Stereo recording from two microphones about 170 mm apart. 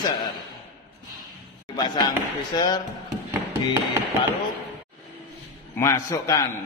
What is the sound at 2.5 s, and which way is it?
Speech, 25° left (ahead or behind).